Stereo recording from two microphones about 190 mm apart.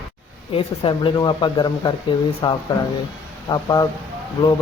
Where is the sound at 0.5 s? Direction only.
30° left (ahead or behind).